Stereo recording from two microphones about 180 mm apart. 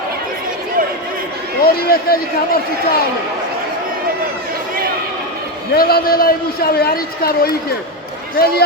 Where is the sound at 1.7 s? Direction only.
55° left (ahead or behind).